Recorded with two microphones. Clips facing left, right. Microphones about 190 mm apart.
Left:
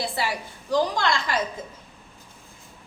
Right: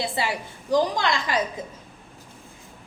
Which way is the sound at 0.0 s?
20° right (ahead or behind).